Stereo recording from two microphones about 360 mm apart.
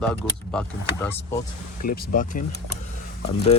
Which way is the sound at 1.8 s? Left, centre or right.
Left.